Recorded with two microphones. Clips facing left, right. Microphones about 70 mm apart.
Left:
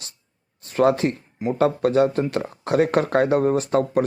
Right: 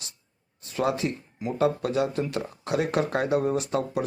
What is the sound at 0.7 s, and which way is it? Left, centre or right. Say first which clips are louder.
Speech: left 8 dB; left.